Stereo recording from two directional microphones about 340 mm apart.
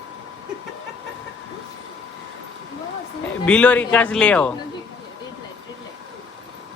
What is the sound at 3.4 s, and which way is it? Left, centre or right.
A man's voice, centre.